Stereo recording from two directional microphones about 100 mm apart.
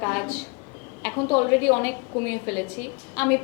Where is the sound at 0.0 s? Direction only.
15° left (ahead or behind).